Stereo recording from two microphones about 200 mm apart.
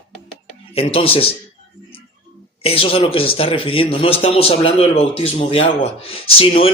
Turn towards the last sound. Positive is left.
turn(degrees=30)  # may be behind; listen again after turning